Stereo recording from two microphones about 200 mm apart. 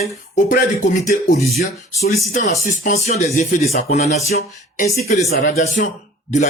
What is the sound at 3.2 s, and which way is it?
Speech, 35° left (ahead or behind).